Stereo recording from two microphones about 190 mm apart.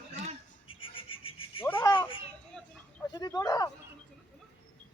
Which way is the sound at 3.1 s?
20° left (ahead or behind).